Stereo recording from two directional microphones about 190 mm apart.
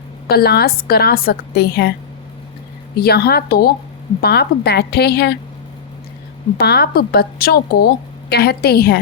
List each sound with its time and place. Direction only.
0.3 s a woman's voice: 55° left (ahead or behind)
3.0 s a woman's voice: 55° left (ahead or behind)
6.6 s a woman's voice: 55° left (ahead or behind)